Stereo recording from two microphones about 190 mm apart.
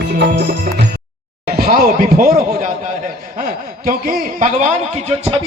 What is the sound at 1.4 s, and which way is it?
Speech, 50° right (ahead or behind).